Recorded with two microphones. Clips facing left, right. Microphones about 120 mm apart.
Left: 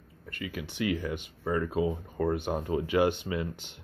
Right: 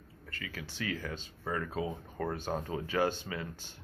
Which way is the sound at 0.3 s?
20° left (ahead or behind).